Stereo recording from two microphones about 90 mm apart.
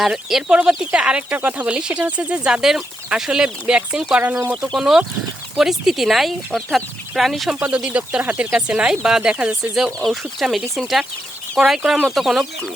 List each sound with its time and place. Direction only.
0.0 s speech: 5° right (ahead or behind)
4.6 s speech: 5° right (ahead or behind)
7.5 s speech: 10° right (ahead or behind)
9.7 s speech: centre (ahead or behind)